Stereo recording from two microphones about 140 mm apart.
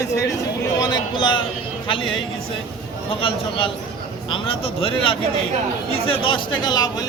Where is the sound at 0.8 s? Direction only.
30° left (ahead or behind).